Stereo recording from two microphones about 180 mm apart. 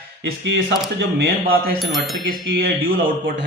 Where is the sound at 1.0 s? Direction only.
70° right (ahead or behind).